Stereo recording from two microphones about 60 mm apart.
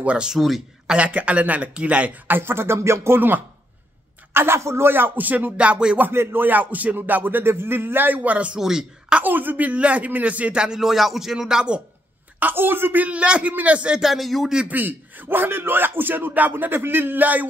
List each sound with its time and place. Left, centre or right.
0.0 s speech: centre
2.2 s a sound: right
3.2 s speech: right
4.3 s a sound: right
4.6 s speech: right; by 5.9 s centre
6.1 s speech: right
8.5 s speech: centre
9.2 s speech: right; by 11.8 s centre
12.4 s speech: right; by 14.0 s centre
14.0 s speech: centre
14.7 s speech: right